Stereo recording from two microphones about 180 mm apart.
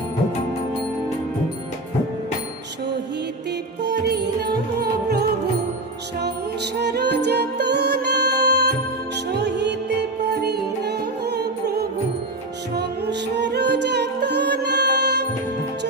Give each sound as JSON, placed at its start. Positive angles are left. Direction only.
{"t": 3.8, "sound": "music", "side_deg": -70}
{"t": 10.8, "sound": "music", "side_deg": -65}